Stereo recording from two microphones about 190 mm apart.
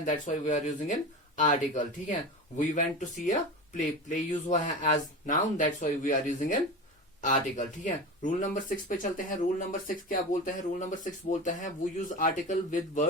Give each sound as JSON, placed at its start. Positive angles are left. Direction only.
{"t": 0.0, "sound": "speech", "side_deg": 40}